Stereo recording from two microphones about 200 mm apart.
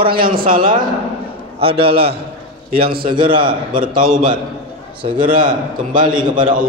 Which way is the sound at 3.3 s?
25° right (ahead or behind).